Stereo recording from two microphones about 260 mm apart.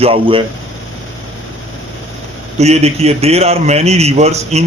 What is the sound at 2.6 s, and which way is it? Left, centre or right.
A man's voice, right.